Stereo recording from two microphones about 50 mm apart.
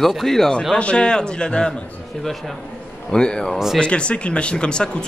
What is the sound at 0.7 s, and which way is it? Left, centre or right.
Speech, centre.